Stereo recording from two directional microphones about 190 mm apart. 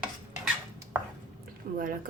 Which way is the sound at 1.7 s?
45° right (ahead or behind).